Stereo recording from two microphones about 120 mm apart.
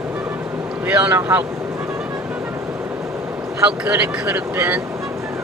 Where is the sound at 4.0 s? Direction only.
10° right (ahead or behind).